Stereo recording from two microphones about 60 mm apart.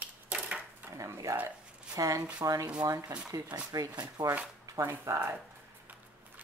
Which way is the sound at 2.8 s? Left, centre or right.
Right.